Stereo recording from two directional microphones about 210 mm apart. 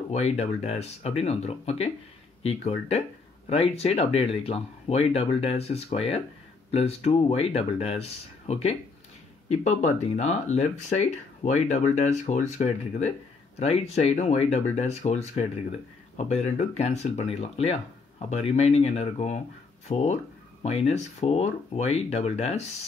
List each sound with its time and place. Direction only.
0.1 s speech: 30° left (ahead or behind)